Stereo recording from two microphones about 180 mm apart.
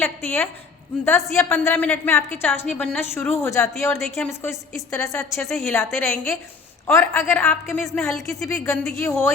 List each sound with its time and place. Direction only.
0.0 s a woman's voice: 15° left (ahead or behind)
8.4 s a woman's voice: 15° left (ahead or behind)
8.7 s speech: centre (ahead or behind)
9.0 s a woman's voice: 15° left (ahead or behind)